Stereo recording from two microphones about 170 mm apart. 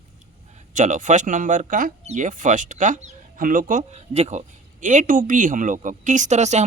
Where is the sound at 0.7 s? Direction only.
45° right (ahead or behind).